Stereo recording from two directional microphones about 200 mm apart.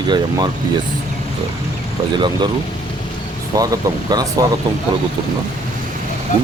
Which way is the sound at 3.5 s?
15° right (ahead or behind).